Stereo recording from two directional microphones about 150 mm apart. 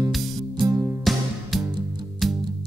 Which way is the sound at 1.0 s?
Centre (ahead or behind).